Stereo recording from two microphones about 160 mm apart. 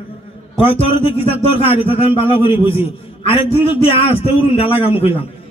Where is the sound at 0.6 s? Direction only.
35° left (ahead or behind).